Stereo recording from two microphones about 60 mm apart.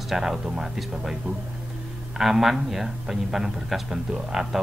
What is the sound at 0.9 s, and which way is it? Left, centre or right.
Speech, centre.